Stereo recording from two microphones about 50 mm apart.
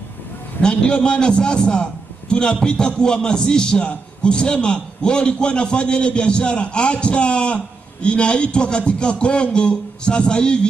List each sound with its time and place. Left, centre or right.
0.6 s a man's voice: centre